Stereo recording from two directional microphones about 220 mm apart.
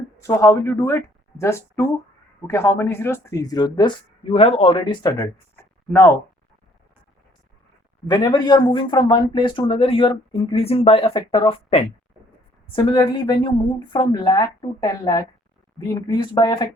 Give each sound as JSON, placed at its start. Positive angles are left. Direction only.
{"t": 0.2, "sound": "speech", "side_deg": 10}
{"t": 8.0, "sound": "speech", "side_deg": 20}